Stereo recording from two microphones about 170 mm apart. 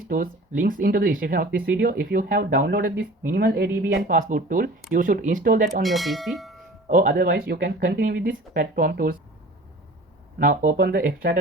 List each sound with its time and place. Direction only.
0.1 s speech: 55° right (ahead or behind)
5.8 s speech: centre (ahead or behind)
6.8 s speech: 55° right (ahead or behind)
10.3 s speech: 60° right (ahead or behind)